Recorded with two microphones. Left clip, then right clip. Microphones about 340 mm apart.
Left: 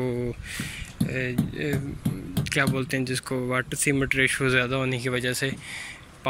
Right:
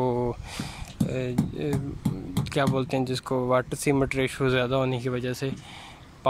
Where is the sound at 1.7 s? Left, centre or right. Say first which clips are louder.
Even; right.